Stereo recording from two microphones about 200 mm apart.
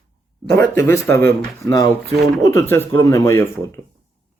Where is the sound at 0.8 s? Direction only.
15° left (ahead or behind).